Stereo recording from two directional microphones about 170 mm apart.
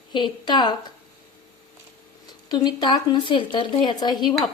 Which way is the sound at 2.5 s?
25° left (ahead or behind).